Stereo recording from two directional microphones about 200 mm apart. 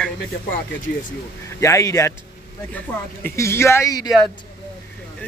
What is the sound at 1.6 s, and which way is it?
Speech, 15° left (ahead or behind).